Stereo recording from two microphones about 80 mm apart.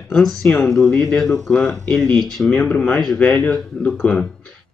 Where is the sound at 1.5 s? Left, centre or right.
Centre.